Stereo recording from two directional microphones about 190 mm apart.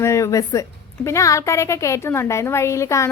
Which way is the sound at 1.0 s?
15° left (ahead or behind).